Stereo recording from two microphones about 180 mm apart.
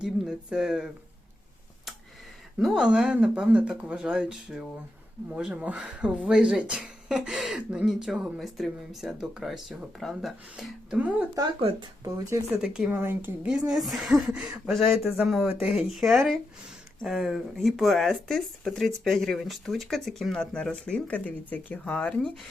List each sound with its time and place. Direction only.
0.0 s speech: 5° right (ahead or behind)
2.6 s speech: centre (ahead or behind)
11.6 s speech: 35° right (ahead or behind)
12.0 s speech: 15° right (ahead or behind); by 22.3 s 5° left (ahead or behind)